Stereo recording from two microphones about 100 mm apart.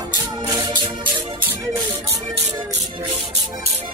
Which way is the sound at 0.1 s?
45° right (ahead or behind).